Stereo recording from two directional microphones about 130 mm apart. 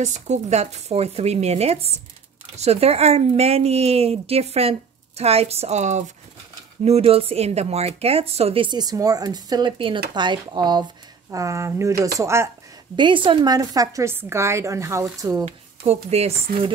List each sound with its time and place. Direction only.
0.0 s speech: 65° right (ahead or behind)
6.8 s speech: 50° right (ahead or behind); by 10.9 s 35° right (ahead or behind)
11.3 s a woman's voice: 25° right (ahead or behind)
12.9 s a woman's voice: 40° right (ahead or behind)
15.4 s speech: 55° right (ahead or behind)